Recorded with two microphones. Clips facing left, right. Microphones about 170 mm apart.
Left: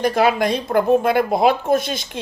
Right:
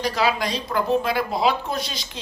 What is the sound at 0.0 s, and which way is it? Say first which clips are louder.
Speech: left 6 dB; 55° left (ahead or behind).